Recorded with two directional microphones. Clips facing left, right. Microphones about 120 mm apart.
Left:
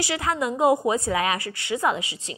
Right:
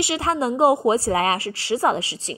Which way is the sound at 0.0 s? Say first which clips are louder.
Right 3 dB; 25° right (ahead or behind).